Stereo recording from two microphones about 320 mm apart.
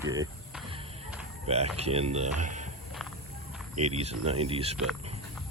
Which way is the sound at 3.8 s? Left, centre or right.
Centre.